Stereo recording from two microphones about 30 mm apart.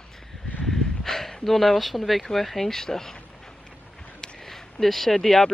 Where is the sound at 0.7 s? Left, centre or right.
Centre.